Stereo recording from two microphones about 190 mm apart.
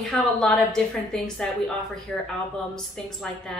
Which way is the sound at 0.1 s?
Centre (ahead or behind).